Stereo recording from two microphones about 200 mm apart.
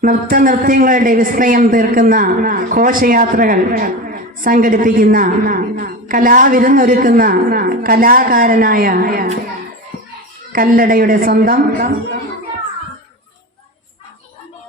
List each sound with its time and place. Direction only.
0.0 s a man's voice: 45° right (ahead or behind)
10.5 s a man's voice: 45° right (ahead or behind)